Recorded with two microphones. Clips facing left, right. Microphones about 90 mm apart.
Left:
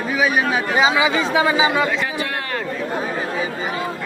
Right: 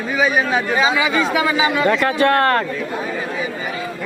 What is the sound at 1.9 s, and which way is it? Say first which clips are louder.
Speech: right 8 dB; 60° right (ahead or behind).